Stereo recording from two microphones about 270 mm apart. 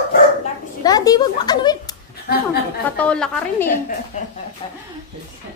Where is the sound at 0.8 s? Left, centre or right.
Centre.